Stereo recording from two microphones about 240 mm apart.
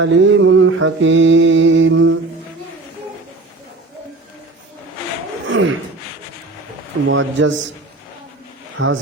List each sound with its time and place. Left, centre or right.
0.0 s mantra: right
5.5 s a sound: right
7.1 s mantra: right
8.8 s mantra: right